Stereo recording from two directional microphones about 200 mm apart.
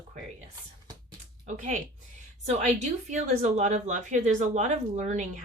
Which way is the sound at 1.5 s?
35° right (ahead or behind).